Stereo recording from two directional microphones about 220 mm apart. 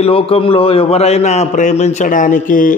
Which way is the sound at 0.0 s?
25° left (ahead or behind).